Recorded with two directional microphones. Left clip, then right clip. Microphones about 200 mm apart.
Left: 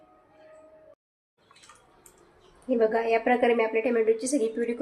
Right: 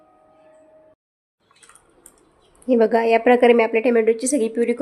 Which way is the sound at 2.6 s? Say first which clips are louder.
Right 8 dB; 60° right (ahead or behind).